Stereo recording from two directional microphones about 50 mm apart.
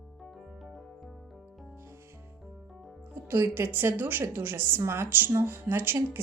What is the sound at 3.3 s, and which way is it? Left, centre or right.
Speech, right.